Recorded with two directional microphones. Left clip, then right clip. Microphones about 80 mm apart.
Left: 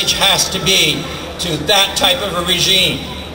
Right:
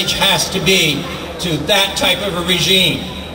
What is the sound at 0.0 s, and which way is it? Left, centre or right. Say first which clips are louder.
A man's voice: left 1 dB; left.